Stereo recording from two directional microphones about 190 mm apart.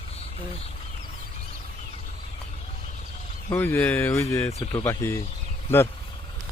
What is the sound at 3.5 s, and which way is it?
Speech, 10° left (ahead or behind).